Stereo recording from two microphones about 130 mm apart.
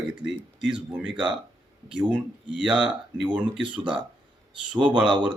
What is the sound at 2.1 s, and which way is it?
A man's voice, 10° right (ahead or behind).